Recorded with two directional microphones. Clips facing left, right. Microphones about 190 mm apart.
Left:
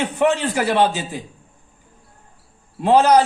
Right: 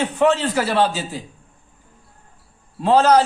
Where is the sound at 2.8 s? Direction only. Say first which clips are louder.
Left 1 dB; 15° left (ahead or behind).